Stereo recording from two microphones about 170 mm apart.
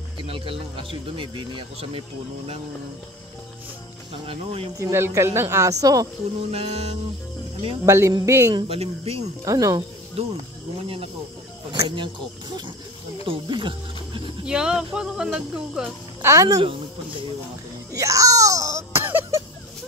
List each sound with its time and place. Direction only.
0.2 s speech: 30° right (ahead or behind)
4.3 s speech: 35° right (ahead or behind)
4.7 s speech: 15° right (ahead or behind)
6.5 s speech: 35° right (ahead or behind)
7.8 s speech: 15° right (ahead or behind)
8.6 s speech: 35° right (ahead or behind)
9.4 s speech: 20° right (ahead or behind)
11.7 s speech: 25° right (ahead or behind)
13.2 s speech: 30° right (ahead or behind)
14.4 s speech: 5° right (ahead or behind)
16.2 s speech: 15° right (ahead or behind)
17.9 s wail: 20° right (ahead or behind)